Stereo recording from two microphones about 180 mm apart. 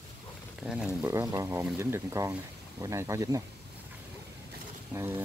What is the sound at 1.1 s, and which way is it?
Speech, 15° right (ahead or behind).